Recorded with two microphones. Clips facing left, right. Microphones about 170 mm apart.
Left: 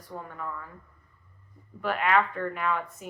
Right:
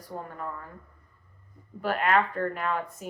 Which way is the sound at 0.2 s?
35° right (ahead or behind).